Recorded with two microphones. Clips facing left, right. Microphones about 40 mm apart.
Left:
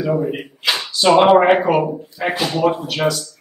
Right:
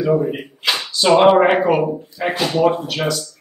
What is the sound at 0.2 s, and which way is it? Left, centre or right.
Speech, centre.